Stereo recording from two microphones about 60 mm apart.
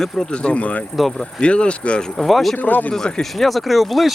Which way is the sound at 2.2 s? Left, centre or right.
Centre.